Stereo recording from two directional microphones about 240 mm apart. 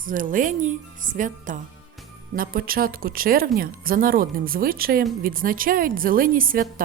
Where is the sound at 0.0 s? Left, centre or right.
Right.